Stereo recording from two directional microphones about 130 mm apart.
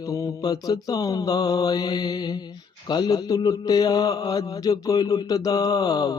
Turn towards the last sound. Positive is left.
turn(degrees=30)  # may be behind; listen again after turning